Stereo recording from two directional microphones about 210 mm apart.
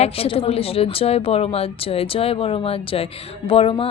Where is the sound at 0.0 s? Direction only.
25° left (ahead or behind).